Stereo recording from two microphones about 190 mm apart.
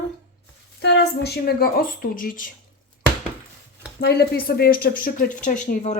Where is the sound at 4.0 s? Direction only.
55° left (ahead or behind).